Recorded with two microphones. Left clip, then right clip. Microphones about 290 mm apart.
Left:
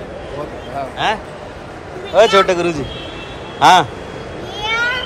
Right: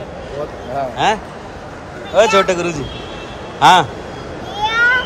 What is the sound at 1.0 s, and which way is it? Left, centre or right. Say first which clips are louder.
A man's voice: right 2 dB; centre.